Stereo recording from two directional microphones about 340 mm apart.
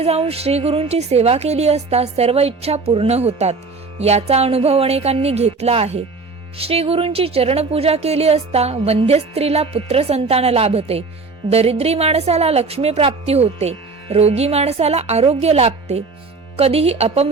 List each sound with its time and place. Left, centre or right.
0.0 s speech: centre